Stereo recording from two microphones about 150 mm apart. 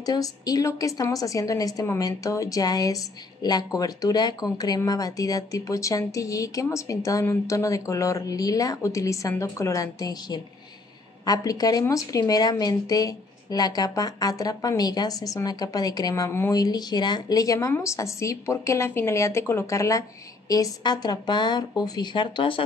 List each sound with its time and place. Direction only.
0.0 s a woman's voice: 25° left (ahead or behind)